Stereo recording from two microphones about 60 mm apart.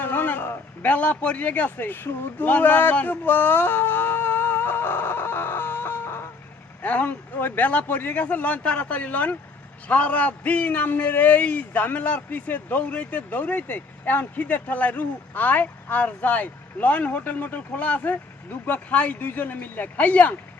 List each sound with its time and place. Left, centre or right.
0.0 s speech: left
2.9 s a sound: left
6.8 s a man's voice: left